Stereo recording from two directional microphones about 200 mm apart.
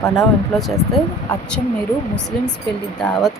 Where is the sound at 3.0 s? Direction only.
Centre (ahead or behind).